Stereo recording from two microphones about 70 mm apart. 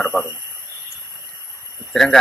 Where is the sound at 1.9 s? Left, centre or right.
Centre.